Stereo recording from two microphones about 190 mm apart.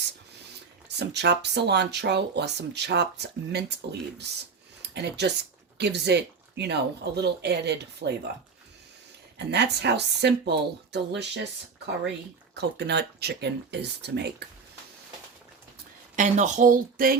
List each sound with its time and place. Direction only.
0.9 s speech: 65° right (ahead or behind)
9.5 s speech: 60° right (ahead or behind)
12.5 s speech: 60° right (ahead or behind)
16.1 s speech: 40° right (ahead or behind)